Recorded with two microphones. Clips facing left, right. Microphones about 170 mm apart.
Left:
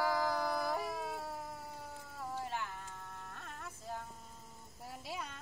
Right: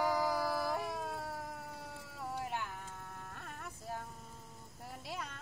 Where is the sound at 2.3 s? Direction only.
10° right (ahead or behind).